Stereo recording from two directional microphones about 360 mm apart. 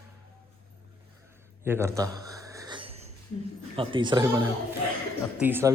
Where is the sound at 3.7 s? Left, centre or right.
Centre.